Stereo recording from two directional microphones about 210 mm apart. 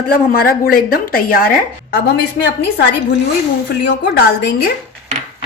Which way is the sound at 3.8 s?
50° left (ahead or behind).